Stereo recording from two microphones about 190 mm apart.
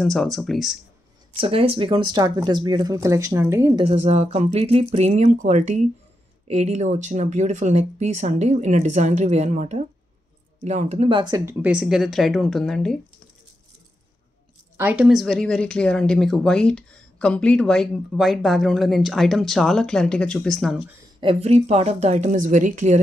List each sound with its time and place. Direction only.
0.0 s speech: centre (ahead or behind)
1.3 s speech: 30° right (ahead or behind)
3.8 s speech: 30° right (ahead or behind)
11.6 s speech: 5° right (ahead or behind)
14.8 s speech: 5° right (ahead or behind)
21.2 s speech: 30° right (ahead or behind)